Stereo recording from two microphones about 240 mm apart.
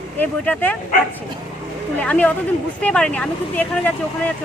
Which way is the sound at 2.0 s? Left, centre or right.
Centre.